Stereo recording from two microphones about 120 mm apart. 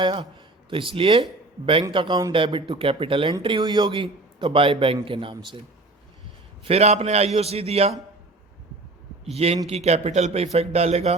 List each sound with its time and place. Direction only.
0.0 s a man's voice: 40° right (ahead or behind)
6.7 s speech: 60° right (ahead or behind)
9.3 s speech: 55° right (ahead or behind)